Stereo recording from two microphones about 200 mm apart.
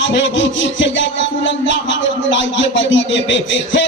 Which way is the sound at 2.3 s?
65° left (ahead or behind).